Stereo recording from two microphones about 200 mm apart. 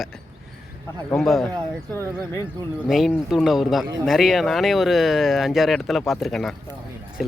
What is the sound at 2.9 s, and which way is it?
Speech, centre (ahead or behind).